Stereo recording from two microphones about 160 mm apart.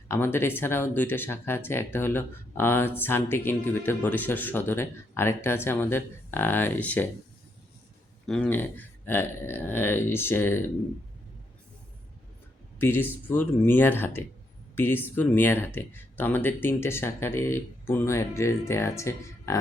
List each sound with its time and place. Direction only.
0.1 s speech: 15° left (ahead or behind)
8.3 s speech: 10° left (ahead or behind)
12.8 s speech: 15° left (ahead or behind)